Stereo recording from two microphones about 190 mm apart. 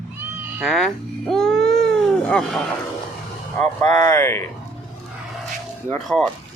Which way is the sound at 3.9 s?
40° right (ahead or behind).